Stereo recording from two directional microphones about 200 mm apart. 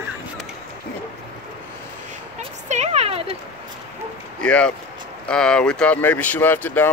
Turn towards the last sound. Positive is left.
turn(degrees=10)  # may be behind; listen again after turning